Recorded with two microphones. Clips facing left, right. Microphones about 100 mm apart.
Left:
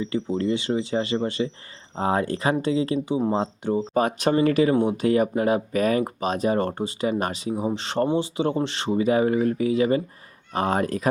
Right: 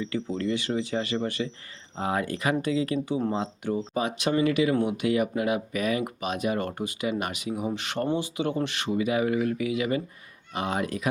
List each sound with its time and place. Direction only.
0.0 s speech: 25° left (ahead or behind)
3.9 s speech: 45° left (ahead or behind)